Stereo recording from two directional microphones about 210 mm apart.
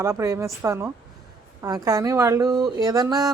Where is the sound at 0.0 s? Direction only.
15° right (ahead or behind).